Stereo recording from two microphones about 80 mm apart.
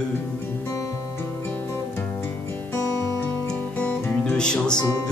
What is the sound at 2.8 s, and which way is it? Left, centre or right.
Music, left.